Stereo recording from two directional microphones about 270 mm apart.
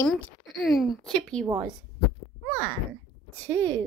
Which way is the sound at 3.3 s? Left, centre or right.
Centre.